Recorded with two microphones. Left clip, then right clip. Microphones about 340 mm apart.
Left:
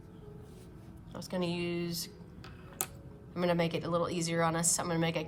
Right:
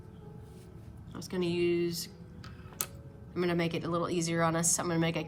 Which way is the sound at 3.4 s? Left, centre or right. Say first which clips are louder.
Left 1 dB; centre.